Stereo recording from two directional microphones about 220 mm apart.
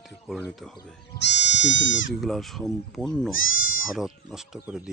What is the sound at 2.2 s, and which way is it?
Speech, centre (ahead or behind).